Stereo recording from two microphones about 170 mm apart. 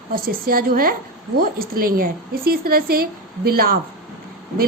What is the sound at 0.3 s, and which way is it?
Speech, 60° right (ahead or behind).